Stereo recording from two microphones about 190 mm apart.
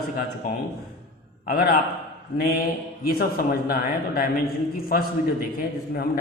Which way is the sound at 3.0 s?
50° left (ahead or behind).